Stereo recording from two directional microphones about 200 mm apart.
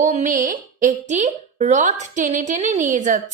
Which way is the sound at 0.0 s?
40° right (ahead or behind).